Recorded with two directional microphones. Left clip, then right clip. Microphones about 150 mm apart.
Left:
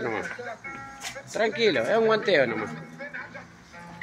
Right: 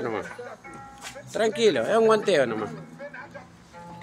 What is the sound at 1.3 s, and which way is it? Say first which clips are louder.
Speech: right 2 dB; 15° right (ahead or behind).